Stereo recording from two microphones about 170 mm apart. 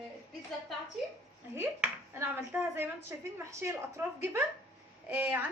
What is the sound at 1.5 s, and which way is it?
A woman's voice, 15° right (ahead or behind).